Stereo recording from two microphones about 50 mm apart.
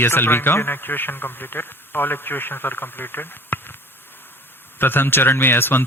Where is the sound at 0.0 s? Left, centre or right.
Left.